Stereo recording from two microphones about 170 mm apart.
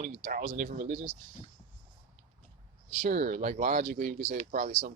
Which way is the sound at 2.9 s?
50° right (ahead or behind).